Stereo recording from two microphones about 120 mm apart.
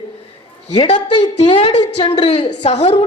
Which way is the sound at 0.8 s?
45° left (ahead or behind).